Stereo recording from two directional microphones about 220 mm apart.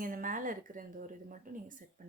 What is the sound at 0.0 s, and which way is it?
Speech, 40° right (ahead or behind).